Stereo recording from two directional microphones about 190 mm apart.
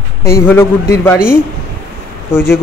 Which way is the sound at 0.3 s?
15° left (ahead or behind).